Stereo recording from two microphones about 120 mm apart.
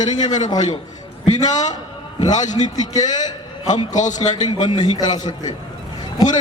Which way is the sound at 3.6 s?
90° left.